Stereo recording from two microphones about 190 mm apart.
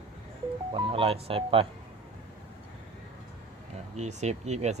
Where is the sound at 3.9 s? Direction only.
35° right (ahead or behind).